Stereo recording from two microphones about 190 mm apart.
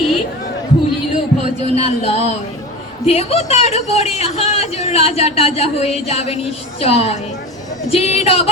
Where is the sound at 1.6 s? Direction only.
35° left (ahead or behind).